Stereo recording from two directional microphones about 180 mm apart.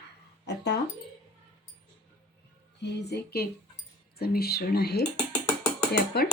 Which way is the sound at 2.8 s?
70° left (ahead or behind).